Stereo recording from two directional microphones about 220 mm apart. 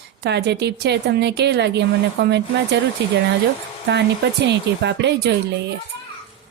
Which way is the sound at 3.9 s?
50° right (ahead or behind).